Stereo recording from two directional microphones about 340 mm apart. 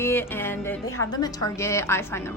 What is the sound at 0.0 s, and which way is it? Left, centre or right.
Music, centre.